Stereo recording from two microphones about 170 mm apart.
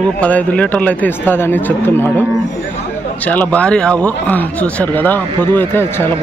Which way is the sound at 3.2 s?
10° left (ahead or behind).